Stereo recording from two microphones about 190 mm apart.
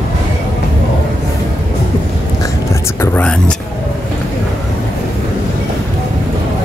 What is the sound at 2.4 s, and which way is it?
Whispering, 15° left (ahead or behind).